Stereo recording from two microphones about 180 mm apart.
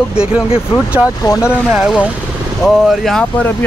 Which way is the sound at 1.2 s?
20° left (ahead or behind).